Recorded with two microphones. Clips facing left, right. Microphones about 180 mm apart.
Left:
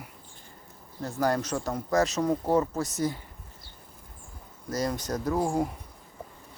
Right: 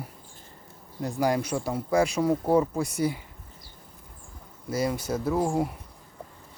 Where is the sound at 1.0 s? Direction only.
15° right (ahead or behind).